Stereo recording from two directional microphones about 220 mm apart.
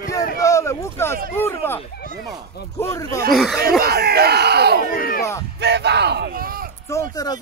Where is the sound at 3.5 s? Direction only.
45° right (ahead or behind).